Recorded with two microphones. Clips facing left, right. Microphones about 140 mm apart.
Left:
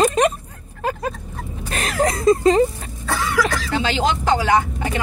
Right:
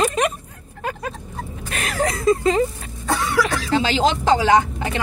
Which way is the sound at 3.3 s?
30° right (ahead or behind).